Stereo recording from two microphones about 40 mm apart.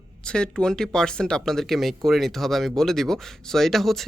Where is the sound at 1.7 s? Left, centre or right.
Centre.